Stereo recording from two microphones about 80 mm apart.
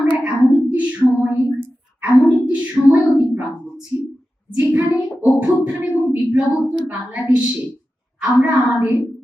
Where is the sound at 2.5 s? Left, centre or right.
Centre.